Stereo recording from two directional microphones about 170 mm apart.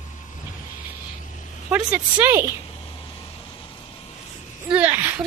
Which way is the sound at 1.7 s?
10° right (ahead or behind).